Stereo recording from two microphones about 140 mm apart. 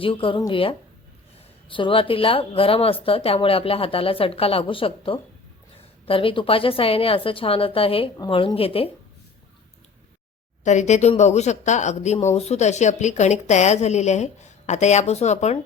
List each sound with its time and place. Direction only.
0.0 s speech: 40° left (ahead or behind)
10.6 s speech: 55° left (ahead or behind)